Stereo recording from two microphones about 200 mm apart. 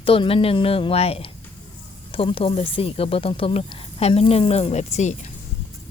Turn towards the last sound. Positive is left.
turn(degrees=35)  # may be behind; listen again after turning